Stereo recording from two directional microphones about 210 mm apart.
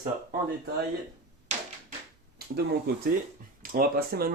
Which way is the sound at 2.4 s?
50° right (ahead or behind).